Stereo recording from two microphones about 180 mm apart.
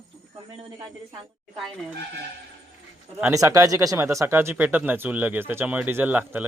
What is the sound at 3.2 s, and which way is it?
Speech, 20° right (ahead or behind).